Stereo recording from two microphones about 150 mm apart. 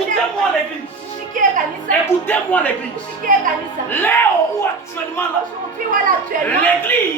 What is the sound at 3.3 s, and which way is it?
Speech, 60° right (ahead or behind).